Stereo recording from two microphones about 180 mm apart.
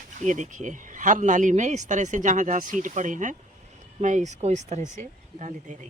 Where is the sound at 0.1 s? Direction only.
45° right (ahead or behind).